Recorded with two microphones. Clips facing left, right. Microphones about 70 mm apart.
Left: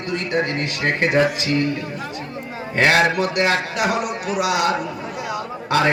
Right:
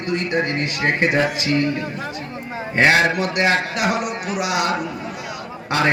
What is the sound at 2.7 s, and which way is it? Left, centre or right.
Speech, right.